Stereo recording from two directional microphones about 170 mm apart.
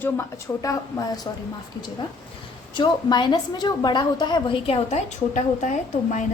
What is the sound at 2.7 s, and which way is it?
A woman's voice, 25° left (ahead or behind).